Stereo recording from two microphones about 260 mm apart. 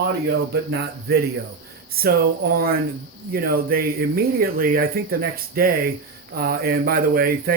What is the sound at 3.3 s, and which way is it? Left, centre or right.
Speech, right.